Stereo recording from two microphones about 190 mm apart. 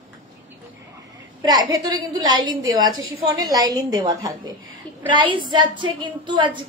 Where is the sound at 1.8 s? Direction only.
20° right (ahead or behind).